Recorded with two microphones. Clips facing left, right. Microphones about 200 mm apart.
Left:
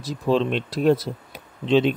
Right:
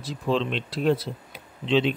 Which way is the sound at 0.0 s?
45° left (ahead or behind).